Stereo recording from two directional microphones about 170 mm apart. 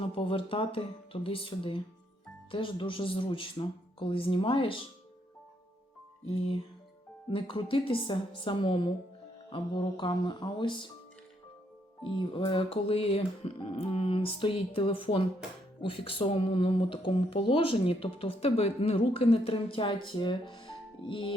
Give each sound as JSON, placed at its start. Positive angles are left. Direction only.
{"t": 0.0, "sound": "speech", "side_deg": 30}
{"t": 6.2, "sound": "a woman's voice", "side_deg": 35}
{"t": 12.0, "sound": "speech", "side_deg": 30}
{"t": 20.5, "sound": "music", "side_deg": 30}